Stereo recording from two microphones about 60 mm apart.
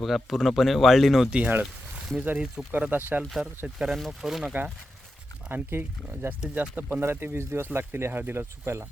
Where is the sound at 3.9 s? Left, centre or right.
Centre.